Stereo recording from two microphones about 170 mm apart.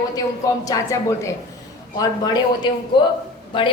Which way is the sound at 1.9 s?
25° left (ahead or behind).